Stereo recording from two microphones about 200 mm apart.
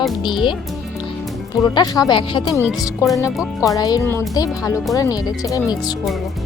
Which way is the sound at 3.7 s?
15° left (ahead or behind).